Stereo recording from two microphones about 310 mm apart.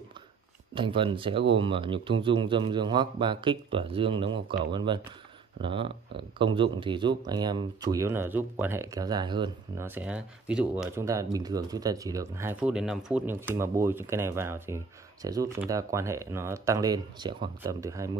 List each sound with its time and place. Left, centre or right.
0.7 s speech: centre